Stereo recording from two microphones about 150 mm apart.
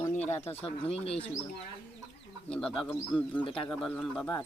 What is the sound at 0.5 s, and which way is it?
Speech, 40° left (ahead or behind).